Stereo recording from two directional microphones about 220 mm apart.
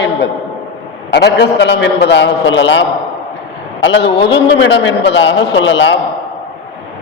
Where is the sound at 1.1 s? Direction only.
50° left (ahead or behind).